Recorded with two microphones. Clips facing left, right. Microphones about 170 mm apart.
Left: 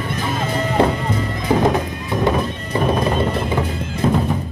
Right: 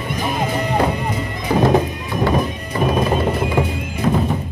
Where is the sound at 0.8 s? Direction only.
25° left (ahead or behind).